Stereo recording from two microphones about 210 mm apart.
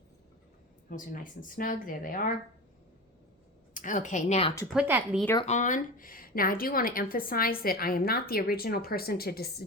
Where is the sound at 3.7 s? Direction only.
35° left (ahead or behind).